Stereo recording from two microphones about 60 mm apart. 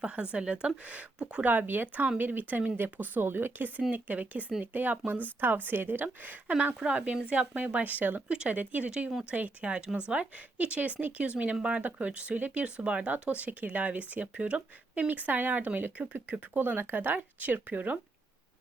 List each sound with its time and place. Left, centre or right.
0.0 s speech: centre
1.5 s speech: right
6.7 s speech: centre
8.3 s speech: centre
8.5 s speech: right
16.6 s speech: right